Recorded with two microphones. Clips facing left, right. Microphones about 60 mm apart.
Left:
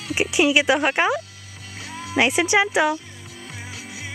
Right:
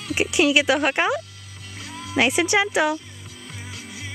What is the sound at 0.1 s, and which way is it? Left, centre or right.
Speech, centre.